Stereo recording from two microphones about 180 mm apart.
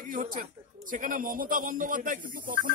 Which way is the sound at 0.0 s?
50° right (ahead or behind).